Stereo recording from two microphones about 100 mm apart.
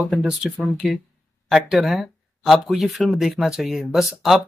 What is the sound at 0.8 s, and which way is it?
Speech, centre (ahead or behind).